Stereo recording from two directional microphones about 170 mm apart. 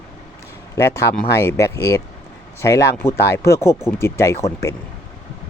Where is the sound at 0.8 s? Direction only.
15° left (ahead or behind).